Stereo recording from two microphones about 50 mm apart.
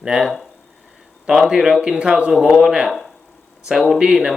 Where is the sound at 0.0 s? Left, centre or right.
Centre.